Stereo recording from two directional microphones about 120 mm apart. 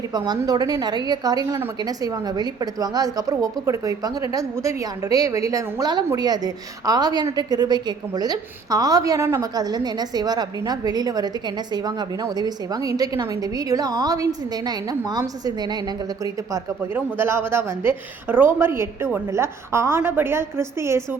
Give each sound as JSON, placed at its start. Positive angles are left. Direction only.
{"t": 0.3, "sound": "a woman's voice", "side_deg": -35}